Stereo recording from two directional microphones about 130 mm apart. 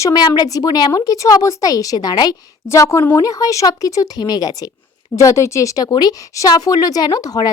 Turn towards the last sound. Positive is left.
turn(degrees=30)  # may be behind; listen again after turning